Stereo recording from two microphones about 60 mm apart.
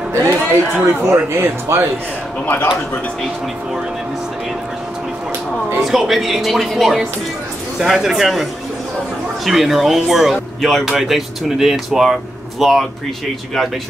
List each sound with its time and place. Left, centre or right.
0.1 s a man's voice: right
2.4 s a man's voice: left
5.8 s speech: centre